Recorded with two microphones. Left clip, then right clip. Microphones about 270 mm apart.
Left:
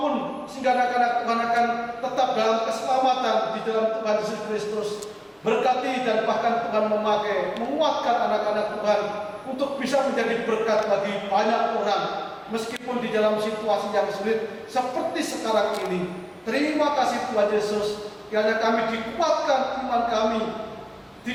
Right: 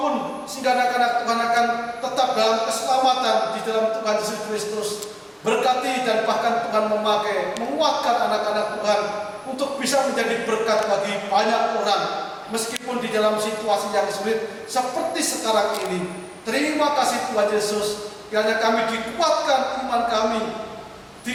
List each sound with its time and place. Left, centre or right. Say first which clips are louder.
0.6 s speech: right 2 dB; centre
5.5 s a man's voice: right 2 dB; centre
15.4 s a man's voice: right 2 dB; centre